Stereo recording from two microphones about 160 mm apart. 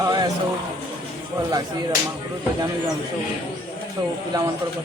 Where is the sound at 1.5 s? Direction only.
25° right (ahead or behind).